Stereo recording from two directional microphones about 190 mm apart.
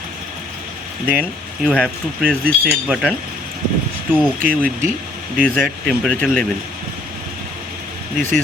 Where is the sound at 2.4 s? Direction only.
50° right (ahead or behind).